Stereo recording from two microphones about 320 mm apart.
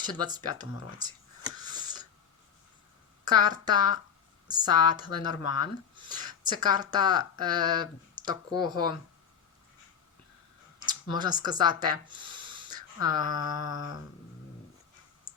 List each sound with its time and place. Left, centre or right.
0.0 s speech: centre
1.6 s a sound: centre
3.2 s speech: centre
10.8 s speech: centre